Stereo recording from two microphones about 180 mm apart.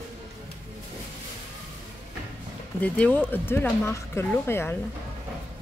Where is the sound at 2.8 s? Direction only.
5° left (ahead or behind).